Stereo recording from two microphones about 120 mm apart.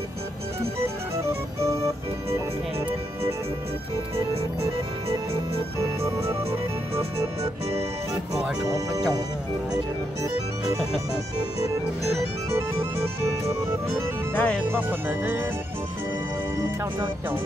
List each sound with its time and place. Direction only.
0.8 s music: 25° right (ahead or behind)
5.8 s music: 25° right (ahead or behind)
8.6 s music: 30° right (ahead or behind)
12.4 s music: 20° right (ahead or behind)
14.3 s music: 10° left (ahead or behind)
14.7 s speech: 15° right (ahead or behind)